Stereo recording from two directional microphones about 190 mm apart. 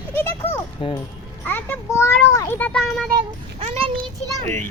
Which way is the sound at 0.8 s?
30° left (ahead or behind).